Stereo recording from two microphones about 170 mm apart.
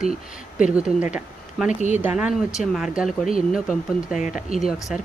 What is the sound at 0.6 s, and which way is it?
Speech, 5° right (ahead or behind).